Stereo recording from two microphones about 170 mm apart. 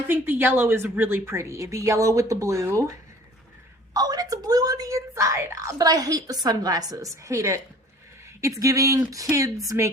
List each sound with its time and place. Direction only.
0.1 s a woman's voice: 10° right (ahead or behind)